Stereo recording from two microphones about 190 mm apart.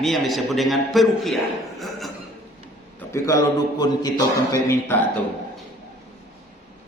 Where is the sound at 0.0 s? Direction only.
Centre (ahead or behind).